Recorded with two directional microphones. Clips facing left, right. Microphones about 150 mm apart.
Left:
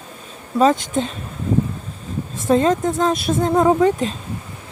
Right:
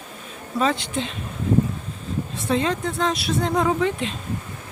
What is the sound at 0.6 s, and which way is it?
Speech, 45° left (ahead or behind).